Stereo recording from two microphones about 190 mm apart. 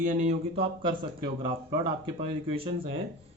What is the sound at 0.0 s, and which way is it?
A man's voice, 40° right (ahead or behind).